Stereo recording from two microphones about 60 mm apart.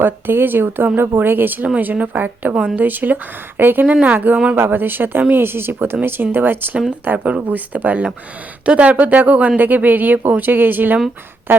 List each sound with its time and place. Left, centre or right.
0.0 s speech: right
4.5 s speech: right